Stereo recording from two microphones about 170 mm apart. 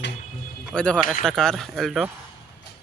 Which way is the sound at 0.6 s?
5° left (ahead or behind).